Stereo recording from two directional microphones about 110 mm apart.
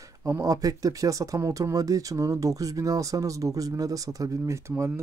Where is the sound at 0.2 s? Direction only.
30° right (ahead or behind).